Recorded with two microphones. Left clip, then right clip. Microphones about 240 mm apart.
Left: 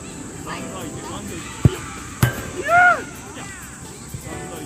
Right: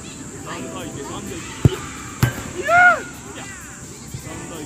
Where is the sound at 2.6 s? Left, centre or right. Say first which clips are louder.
Right 1 dB; right.